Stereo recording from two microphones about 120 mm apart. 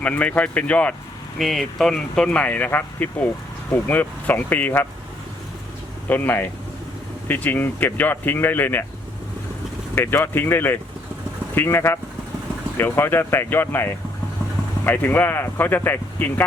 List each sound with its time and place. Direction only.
0.0 s speech: 10° left (ahead or behind)
1.4 s speech: centre (ahead or behind)
6.1 s speech: 15° left (ahead or behind)
9.9 s speech: 20° left (ahead or behind)